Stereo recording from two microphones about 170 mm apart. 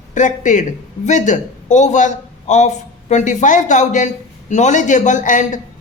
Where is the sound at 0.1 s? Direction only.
45° left (ahead or behind).